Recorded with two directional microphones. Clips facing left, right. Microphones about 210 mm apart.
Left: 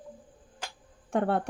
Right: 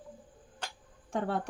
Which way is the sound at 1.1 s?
60° left (ahead or behind).